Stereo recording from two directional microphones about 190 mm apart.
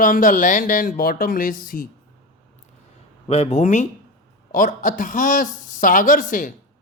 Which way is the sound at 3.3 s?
30° left (ahead or behind).